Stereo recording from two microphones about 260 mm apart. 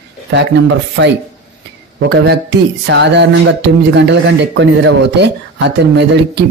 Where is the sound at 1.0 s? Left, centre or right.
Right.